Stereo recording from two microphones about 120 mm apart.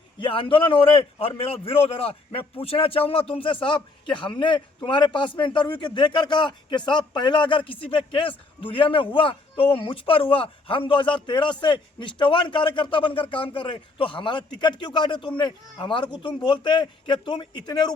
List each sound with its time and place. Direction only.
0.2 s a man's voice: 45° left (ahead or behind)